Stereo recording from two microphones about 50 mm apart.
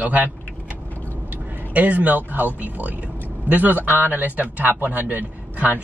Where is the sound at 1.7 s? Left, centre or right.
Right.